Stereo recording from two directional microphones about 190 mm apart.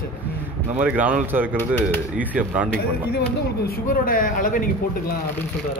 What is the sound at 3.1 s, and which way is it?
Speech, 55° left (ahead or behind).